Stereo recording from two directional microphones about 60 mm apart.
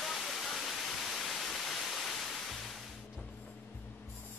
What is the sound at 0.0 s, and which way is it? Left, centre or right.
Waterfall, centre.